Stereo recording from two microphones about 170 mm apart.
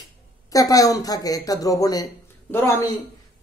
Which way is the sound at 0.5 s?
20° left (ahead or behind).